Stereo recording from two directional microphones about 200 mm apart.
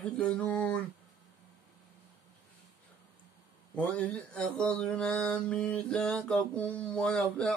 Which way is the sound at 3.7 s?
5° left (ahead or behind).